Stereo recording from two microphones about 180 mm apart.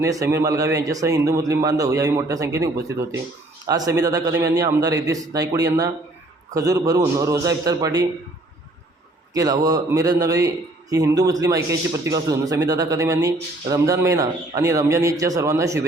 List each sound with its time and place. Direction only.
0.0 s a man's voice: 15° right (ahead or behind)
9.3 s a man's voice: 20° right (ahead or behind)